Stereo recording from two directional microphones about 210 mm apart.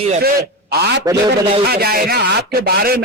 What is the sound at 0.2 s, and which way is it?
A man's voice, 50° right (ahead or behind).